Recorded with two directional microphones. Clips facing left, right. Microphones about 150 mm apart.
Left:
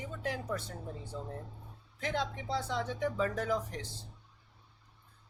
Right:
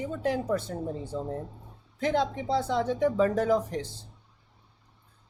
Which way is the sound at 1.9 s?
30° right (ahead or behind).